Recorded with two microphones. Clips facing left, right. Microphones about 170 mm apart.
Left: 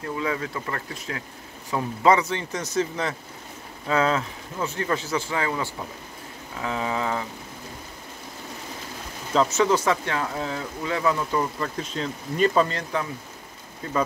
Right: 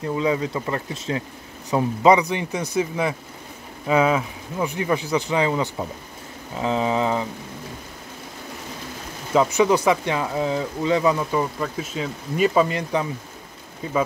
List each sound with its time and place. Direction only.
0.0 s speech: 20° right (ahead or behind)
9.3 s speech: 15° right (ahead or behind)
11.6 s speech: 5° right (ahead or behind)